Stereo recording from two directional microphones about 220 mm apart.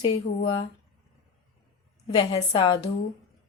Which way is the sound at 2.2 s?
20° left (ahead or behind).